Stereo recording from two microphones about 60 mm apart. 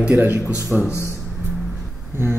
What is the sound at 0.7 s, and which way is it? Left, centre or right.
Speech, centre.